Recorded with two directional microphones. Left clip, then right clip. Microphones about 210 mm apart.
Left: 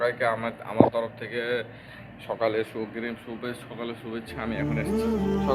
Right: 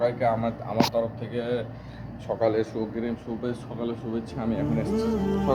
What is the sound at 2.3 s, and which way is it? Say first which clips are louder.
Speech: right 2 dB; 10° left (ahead or behind).